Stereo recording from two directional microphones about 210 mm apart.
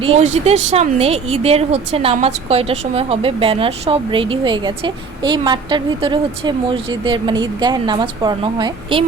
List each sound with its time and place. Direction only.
0.0 s speech: 30° right (ahead or behind)